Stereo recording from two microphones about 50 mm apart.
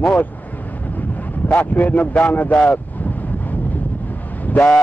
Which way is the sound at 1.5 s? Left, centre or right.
Left.